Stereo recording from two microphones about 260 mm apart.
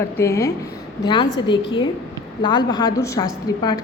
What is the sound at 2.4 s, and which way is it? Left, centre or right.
A woman's voice, centre.